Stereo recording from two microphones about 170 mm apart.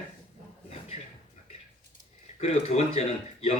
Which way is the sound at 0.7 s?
40° left (ahead or behind).